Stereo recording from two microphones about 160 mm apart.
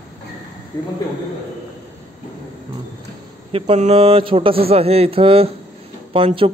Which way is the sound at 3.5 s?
40° right (ahead or behind).